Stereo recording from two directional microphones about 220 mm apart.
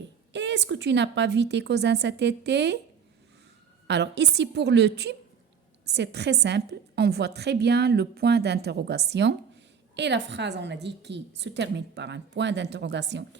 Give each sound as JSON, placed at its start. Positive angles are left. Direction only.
{"t": 0.3, "sound": "a woman's voice", "side_deg": -50}
{"t": 3.8, "sound": "a woman's voice", "side_deg": -50}